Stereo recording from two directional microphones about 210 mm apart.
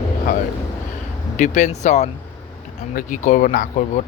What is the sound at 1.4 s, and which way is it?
Speech, 35° left (ahead or behind).